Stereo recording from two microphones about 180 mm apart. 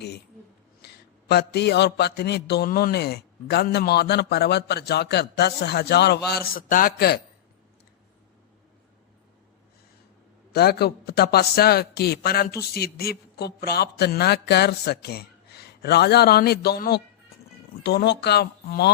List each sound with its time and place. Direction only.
0.8 s a sound: 60° left (ahead or behind)
1.3 s a man's voice: 65° left (ahead or behind)
10.5 s a man's voice: 60° left (ahead or behind)